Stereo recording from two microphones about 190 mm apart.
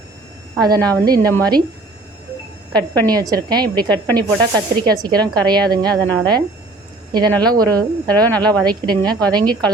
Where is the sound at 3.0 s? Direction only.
20° right (ahead or behind).